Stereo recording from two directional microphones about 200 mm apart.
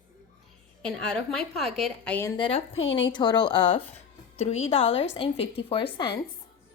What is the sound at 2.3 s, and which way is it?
A woman's voice, 25° left (ahead or behind).